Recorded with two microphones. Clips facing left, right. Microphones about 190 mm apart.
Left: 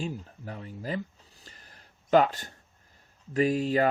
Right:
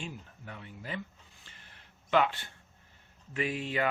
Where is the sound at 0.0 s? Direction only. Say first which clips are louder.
Left 8 dB; 35° left (ahead or behind).